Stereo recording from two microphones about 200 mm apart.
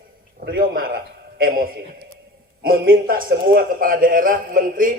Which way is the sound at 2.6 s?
45° right (ahead or behind).